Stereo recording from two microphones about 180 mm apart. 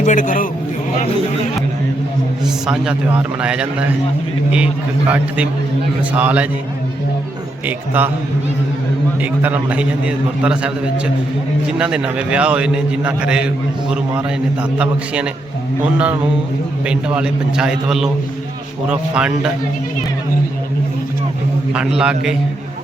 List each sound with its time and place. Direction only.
0.0 s a man's voice: 45° left (ahead or behind)
2.6 s a man's voice: 5° right (ahead or behind)
7.9 s a man's voice: 10° right (ahead or behind)
9.2 s a man's voice: 10° right (ahead or behind)
11.8 s a man's voice: 5° right (ahead or behind)
14.8 s a man's voice: 5° right (ahead or behind)
21.7 s a man's voice: 5° right (ahead or behind)